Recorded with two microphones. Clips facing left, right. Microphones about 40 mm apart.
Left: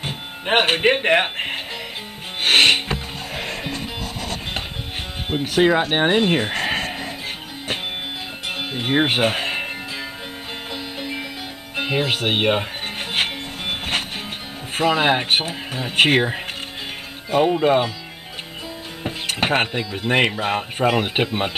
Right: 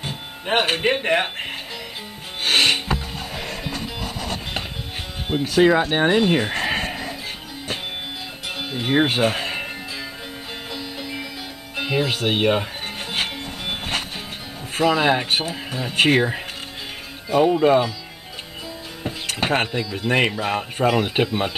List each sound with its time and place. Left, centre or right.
0.0 s speech: left
2.4 s music: left
3.6 s music: left
5.3 s speech: centre
6.4 s livestock: centre
6.9 s music: centre
8.5 s music: centre
9.1 s speech: left
10.7 s music: left
11.7 s speech: left
13.7 s music: left
14.8 s speech: left
17.5 s speech: centre
19.0 s speech: centre